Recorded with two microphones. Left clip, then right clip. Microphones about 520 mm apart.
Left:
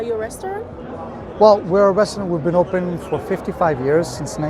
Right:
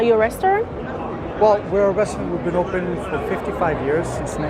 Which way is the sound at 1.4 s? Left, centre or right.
Left.